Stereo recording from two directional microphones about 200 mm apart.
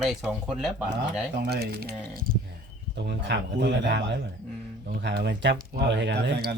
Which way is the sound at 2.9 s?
60° right (ahead or behind).